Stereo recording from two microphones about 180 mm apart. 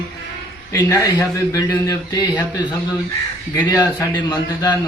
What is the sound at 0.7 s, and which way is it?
Speech, 15° left (ahead or behind).